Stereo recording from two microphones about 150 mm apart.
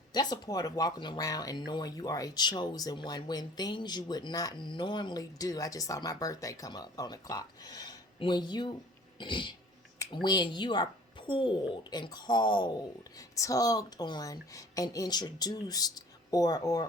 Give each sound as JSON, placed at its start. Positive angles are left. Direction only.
{"t": 0.1, "sound": "speech", "side_deg": 25}
{"t": 9.1, "sound": "throat clearing", "side_deg": 30}
{"t": 10.2, "sound": "a woman's voice", "side_deg": 30}